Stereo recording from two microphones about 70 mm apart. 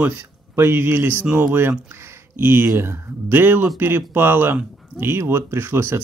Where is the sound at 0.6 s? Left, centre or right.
Right.